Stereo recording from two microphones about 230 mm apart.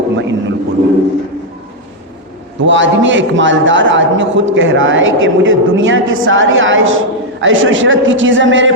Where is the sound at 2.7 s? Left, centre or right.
Right.